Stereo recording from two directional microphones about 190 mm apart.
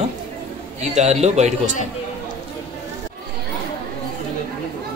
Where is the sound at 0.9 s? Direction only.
35° right (ahead or behind).